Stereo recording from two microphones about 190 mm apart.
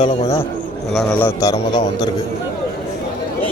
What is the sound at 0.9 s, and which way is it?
Speech, centre (ahead or behind).